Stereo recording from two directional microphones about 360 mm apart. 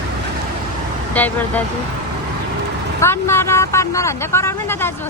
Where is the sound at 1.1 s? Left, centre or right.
Centre.